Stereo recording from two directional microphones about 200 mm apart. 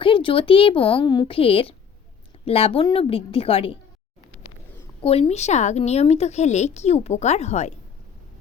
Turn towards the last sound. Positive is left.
turn(degrees=35)  # may be behind; listen again after turning